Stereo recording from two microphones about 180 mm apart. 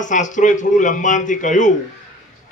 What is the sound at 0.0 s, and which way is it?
Speech, 45° left (ahead or behind).